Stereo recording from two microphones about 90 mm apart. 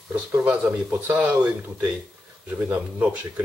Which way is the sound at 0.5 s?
15° right (ahead or behind).